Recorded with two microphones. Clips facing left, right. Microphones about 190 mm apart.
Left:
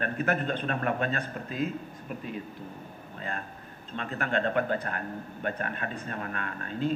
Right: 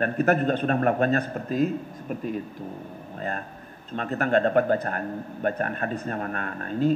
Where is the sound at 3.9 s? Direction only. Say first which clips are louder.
Right 7 dB; 45° right (ahead or behind).